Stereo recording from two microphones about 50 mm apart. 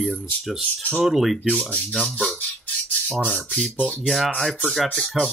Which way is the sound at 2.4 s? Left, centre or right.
Left.